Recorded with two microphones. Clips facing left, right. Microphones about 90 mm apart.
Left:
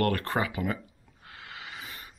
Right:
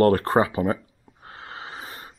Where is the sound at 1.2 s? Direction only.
35° right (ahead or behind).